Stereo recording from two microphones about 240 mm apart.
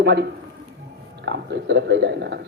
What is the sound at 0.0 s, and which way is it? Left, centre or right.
A man's voice, right.